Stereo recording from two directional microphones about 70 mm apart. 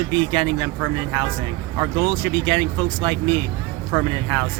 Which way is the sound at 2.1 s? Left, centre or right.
Left.